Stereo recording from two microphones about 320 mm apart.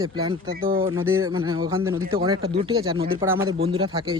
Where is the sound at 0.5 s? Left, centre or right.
Right.